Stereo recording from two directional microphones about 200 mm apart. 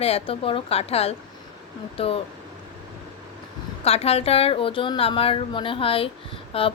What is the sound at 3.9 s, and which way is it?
A woman's voice, 30° left (ahead or behind).